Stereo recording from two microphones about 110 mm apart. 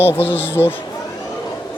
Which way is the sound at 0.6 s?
20° left (ahead or behind).